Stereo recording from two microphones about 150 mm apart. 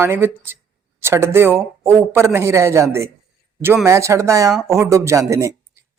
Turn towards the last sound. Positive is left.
turn(degrees=-20)  # may be behind; listen again after turning